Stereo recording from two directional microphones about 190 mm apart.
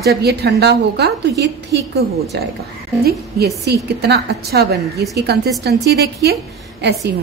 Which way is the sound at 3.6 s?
60° right (ahead or behind).